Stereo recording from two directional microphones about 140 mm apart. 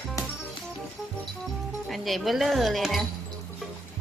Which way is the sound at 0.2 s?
25° left (ahead or behind).